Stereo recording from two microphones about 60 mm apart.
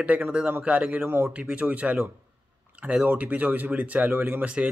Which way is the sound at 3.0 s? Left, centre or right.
Right.